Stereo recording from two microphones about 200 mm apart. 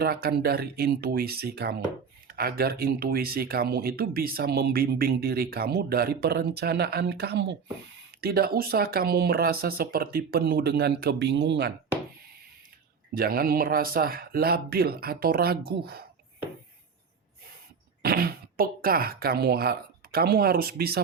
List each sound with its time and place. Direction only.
0.0 s speech: 50° right (ahead or behind)
13.1 s speech: 45° right (ahead or behind)
18.0 s speech: 50° right (ahead or behind)